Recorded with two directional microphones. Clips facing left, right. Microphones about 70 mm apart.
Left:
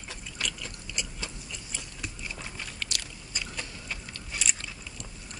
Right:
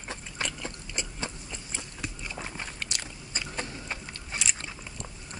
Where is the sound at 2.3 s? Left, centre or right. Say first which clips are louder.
Right 3 dB; right.